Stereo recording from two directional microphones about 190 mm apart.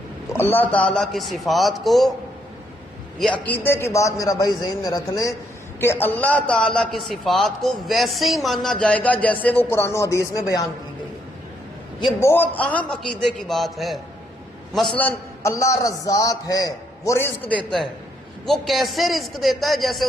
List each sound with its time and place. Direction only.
0.3 s a man's voice: 10° left (ahead or behind)
3.2 s a man's voice: 5° left (ahead or behind)
12.2 s a man's voice: 10° left (ahead or behind)